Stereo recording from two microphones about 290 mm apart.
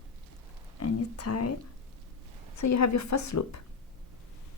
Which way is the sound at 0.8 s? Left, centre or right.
Left.